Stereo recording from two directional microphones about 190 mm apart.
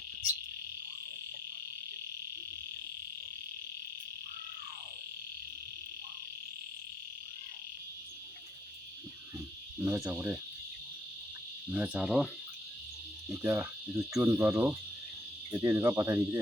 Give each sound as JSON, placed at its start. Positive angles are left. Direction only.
{"t": 9.8, "sound": "speech", "side_deg": -15}
{"t": 11.7, "sound": "insect", "side_deg": -5}
{"t": 13.3, "sound": "speech", "side_deg": -10}